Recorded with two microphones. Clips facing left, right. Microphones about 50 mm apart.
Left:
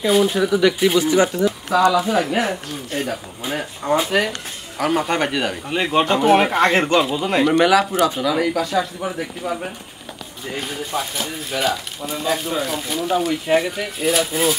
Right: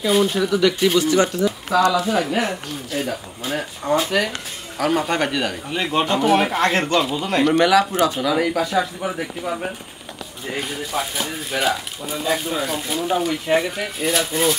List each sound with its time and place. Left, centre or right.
0.1 s speech: centre
0.4 s speech: centre
5.7 s speech: centre
6.5 s speech: centre
6.8 s speech: centre
11.0 s speech: centre